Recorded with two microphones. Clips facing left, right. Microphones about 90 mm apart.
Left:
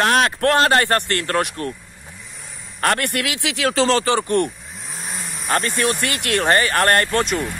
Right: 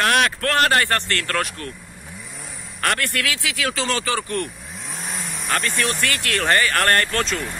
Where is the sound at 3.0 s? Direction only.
20° left (ahead or behind).